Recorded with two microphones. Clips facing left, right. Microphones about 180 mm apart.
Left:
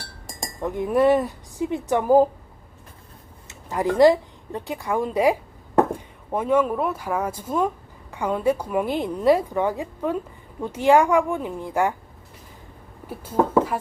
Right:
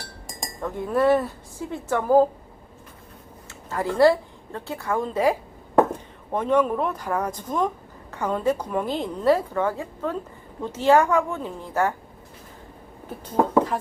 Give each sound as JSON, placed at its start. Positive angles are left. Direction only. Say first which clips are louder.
{"t": 0.6, "sound": "a woman's voice", "louder": "left 2 dB", "side_deg": 15}
{"t": 3.7, "sound": "a woman's voice", "louder": "left 2 dB", "side_deg": 15}
{"t": 13.1, "sound": "speech", "louder": "left 1 dB", "side_deg": 10}